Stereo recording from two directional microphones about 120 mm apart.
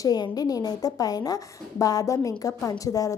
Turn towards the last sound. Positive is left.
turn(degrees=30)  # may be behind; listen again after turning